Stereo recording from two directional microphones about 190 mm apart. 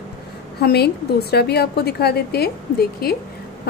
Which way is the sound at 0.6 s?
55° left (ahead or behind).